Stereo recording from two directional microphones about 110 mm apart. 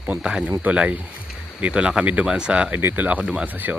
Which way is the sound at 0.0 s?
10° right (ahead or behind).